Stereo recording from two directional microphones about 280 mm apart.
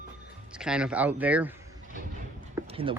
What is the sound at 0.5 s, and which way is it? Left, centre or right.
Speech, centre.